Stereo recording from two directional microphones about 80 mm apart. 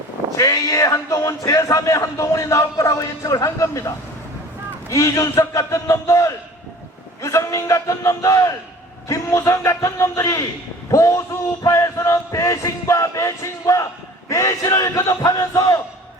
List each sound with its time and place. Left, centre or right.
0.3 s speech: left
15.1 s crowd: left